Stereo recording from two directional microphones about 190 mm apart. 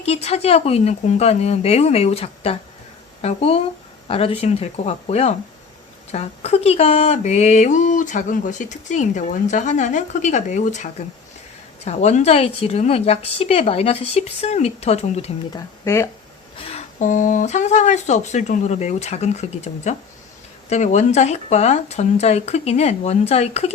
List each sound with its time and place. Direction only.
0.0 s mantra: 35° left (ahead or behind)
3.2 s speech: 35° left (ahead or behind)
4.1 s mantra: 30° left (ahead or behind)
11.9 s mantra: 35° left (ahead or behind)
15.5 s speech: 15° left (ahead or behind)
16.6 s mantra: 30° left (ahead or behind)